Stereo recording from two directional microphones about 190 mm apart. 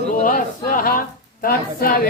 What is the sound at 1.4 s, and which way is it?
Speech, 50° left (ahead or behind).